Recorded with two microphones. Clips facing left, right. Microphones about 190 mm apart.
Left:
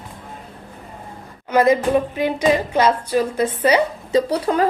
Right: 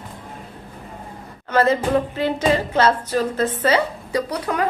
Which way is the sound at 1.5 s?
15° left (ahead or behind).